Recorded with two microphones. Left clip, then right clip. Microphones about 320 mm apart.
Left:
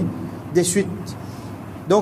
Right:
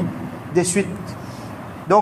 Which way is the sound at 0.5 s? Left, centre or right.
Centre.